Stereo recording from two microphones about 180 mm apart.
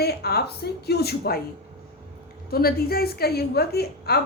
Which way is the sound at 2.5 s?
55° left (ahead or behind).